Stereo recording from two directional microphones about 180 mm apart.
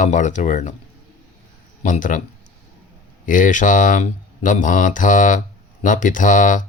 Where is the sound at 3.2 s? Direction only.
45° left (ahead or behind).